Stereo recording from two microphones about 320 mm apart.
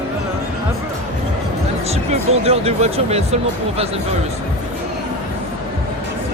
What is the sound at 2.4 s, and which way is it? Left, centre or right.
Speech, centre.